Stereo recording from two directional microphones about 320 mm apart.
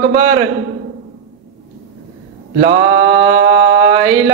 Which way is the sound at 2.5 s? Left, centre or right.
Right.